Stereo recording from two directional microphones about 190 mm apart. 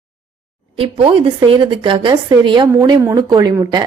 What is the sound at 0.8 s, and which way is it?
A woman's voice, 30° right (ahead or behind).